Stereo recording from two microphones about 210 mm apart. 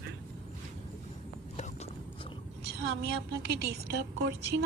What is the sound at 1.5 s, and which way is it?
Clip-clop, 35° left (ahead or behind).